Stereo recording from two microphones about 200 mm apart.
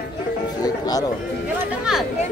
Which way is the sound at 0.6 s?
20° left (ahead or behind).